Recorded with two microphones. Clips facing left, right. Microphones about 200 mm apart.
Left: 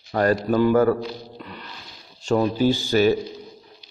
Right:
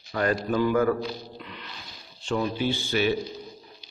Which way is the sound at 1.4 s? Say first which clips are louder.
Left 4 dB; 45° left (ahead or behind).